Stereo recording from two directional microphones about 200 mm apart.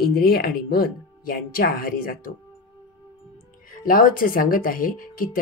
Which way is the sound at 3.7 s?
45° left (ahead or behind).